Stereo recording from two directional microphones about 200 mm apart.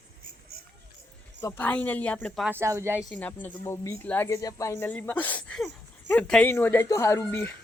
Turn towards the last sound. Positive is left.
turn(degrees=10)  # may be behind; listen again after turning